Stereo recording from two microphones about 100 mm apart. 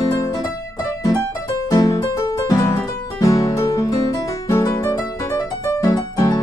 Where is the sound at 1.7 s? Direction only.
35° left (ahead or behind).